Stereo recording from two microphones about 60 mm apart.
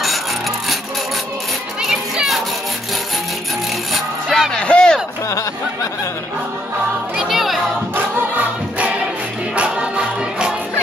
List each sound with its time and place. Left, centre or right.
1.8 s music: centre
3.9 s music: centre
7.2 s music: centre
7.9 s music: right
9.6 s music: centre